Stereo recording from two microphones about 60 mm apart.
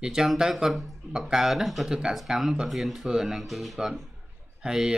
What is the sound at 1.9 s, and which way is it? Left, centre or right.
Speech, centre.